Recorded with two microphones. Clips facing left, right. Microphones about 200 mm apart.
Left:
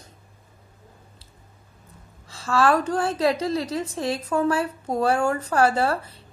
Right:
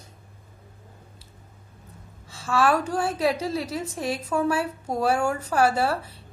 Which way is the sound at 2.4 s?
5° right (ahead or behind).